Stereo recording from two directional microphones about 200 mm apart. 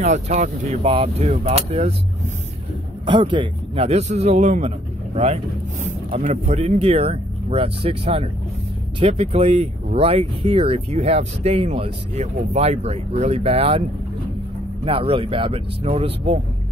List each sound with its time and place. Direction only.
0.0 s speech: 35° right (ahead or behind)
3.1 s a man's voice: 25° right (ahead or behind)
14.9 s speech: 25° right (ahead or behind)